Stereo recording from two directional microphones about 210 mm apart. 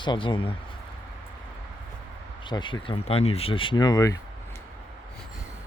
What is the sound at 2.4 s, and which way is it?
Speech, 20° left (ahead or behind).